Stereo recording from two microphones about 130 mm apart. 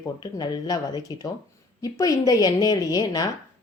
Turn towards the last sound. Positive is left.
turn(degrees=30)  # may be behind; listen again after turning